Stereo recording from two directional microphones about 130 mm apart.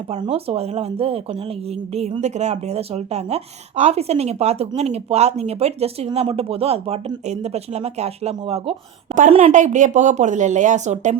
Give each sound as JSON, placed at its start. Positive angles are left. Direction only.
{"t": 0.2, "sound": "speech", "side_deg": -45}
{"t": 9.4, "sound": "speech", "side_deg": -70}